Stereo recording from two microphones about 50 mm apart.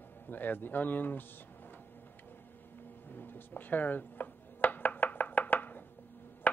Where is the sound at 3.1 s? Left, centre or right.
Left.